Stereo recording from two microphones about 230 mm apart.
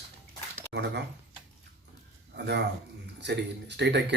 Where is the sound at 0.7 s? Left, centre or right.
Right.